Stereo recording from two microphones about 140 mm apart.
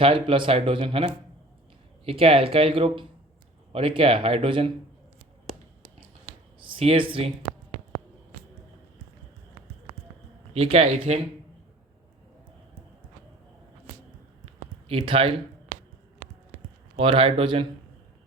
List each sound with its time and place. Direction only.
0.0 s speech: 40° right (ahead or behind)
6.6 s speech: 40° right (ahead or behind)
10.5 s speech: 45° right (ahead or behind)
14.8 s speech: 40° right (ahead or behind)
15.7 s a sound: 90° right
17.0 s speech: 40° right (ahead or behind)